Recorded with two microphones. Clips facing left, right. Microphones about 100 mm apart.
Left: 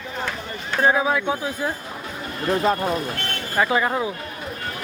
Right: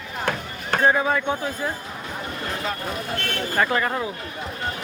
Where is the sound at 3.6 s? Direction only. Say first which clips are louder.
Left 3 dB; 10° left (ahead or behind).